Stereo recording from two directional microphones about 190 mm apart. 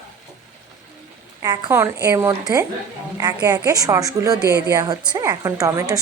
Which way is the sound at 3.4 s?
20° right (ahead or behind).